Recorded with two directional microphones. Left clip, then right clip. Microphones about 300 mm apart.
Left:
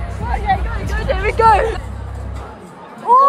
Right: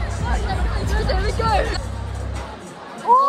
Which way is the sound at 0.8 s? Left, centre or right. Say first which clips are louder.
Left 5 dB; centre.